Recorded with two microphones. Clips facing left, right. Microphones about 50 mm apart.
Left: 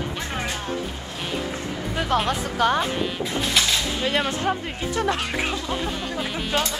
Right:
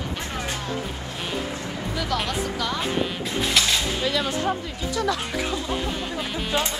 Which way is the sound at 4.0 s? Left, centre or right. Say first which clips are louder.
Left 1 dB; left.